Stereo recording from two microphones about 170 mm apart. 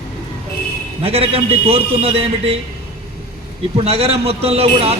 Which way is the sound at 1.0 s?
35° right (ahead or behind).